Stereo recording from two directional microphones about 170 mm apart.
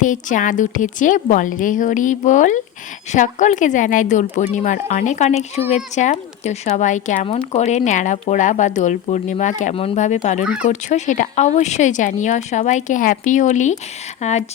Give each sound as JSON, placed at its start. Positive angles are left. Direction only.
{"t": 0.0, "sound": "speech", "side_deg": 50}
{"t": 7.3, "sound": "speech", "side_deg": 30}
{"t": 7.6, "sound": "speech", "side_deg": 40}
{"t": 10.4, "sound": "speech", "side_deg": -5}
{"t": 10.7, "sound": "speech", "side_deg": 45}